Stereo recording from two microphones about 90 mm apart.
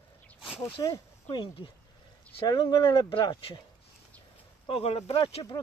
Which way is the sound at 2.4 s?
55° left (ahead or behind).